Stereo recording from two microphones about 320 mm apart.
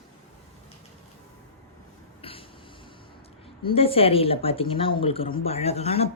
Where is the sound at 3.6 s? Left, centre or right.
Centre.